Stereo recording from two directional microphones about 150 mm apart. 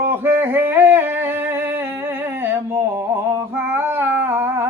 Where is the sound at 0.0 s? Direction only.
15° right (ahead or behind).